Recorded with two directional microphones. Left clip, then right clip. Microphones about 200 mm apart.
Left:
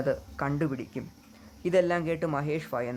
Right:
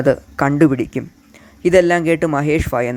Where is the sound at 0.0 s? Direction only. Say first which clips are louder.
Right 14 dB; 30° right (ahead or behind).